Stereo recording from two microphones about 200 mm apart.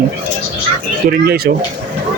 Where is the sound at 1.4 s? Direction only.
50° right (ahead or behind).